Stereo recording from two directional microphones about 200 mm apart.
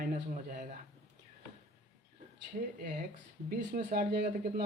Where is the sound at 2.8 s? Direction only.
45° right (ahead or behind).